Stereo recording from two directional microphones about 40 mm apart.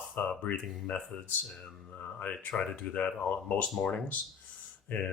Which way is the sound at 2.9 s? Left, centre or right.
Left.